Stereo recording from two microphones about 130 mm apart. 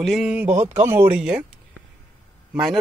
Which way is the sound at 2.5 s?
5° right (ahead or behind).